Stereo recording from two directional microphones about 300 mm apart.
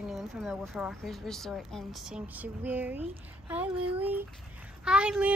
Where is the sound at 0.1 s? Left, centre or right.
Centre.